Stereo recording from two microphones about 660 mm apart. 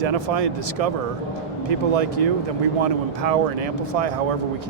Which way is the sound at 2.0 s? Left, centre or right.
Right.